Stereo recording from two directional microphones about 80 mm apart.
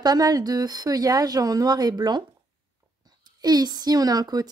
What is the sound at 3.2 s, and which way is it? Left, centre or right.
A woman's voice, right.